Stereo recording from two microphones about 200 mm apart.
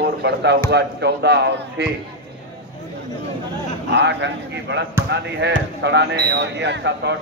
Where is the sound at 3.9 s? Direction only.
60° right (ahead or behind).